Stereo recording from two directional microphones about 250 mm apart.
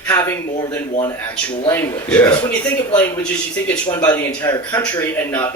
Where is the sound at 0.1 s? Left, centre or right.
Centre.